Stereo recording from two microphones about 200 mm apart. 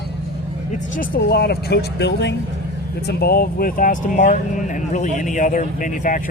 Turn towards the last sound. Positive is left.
turn(degrees=40)  # may be behind; listen again after turning